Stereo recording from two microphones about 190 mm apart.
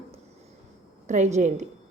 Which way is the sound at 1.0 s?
40° right (ahead or behind).